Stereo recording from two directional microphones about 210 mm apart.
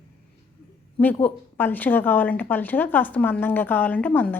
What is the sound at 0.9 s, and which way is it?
Speech, 10° left (ahead or behind).